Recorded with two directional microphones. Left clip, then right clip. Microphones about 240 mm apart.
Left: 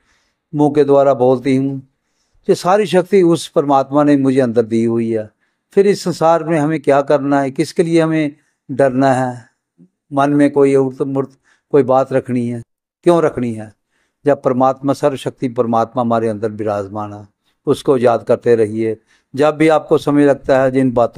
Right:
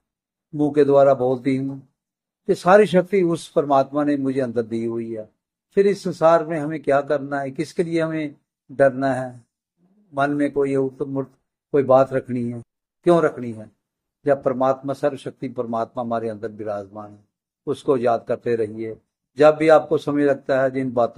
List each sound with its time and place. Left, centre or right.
0.6 s a man's voice: left